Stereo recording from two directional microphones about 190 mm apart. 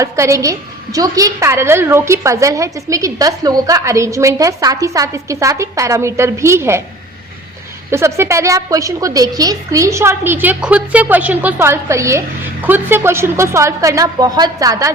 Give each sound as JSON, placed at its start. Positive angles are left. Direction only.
{"t": 0.0, "sound": "a woman's voice", "side_deg": -15}
{"t": 7.9, "sound": "a woman's voice", "side_deg": -15}